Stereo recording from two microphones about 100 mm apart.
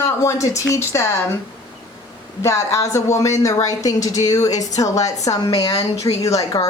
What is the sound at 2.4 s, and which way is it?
Speech, 30° left (ahead or behind).